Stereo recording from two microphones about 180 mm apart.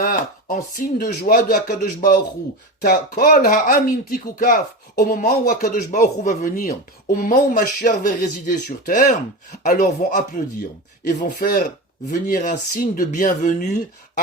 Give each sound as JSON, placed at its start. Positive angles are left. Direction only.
{"t": 0.0, "sound": "speech", "side_deg": 55}